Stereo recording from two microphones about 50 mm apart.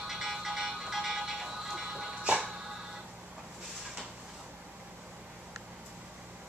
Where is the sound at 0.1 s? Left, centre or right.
Centre.